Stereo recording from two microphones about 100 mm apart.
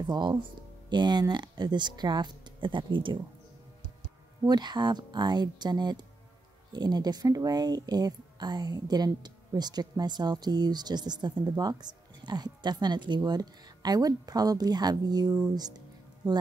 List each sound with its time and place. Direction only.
0.0 s speech: 45° right (ahead or behind)
4.5 s speech: 45° right (ahead or behind)